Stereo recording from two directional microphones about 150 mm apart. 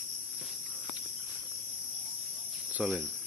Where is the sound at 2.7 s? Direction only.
5° right (ahead or behind).